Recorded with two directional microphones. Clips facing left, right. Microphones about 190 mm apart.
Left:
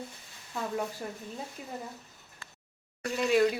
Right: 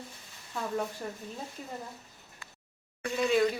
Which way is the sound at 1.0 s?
5° left (ahead or behind).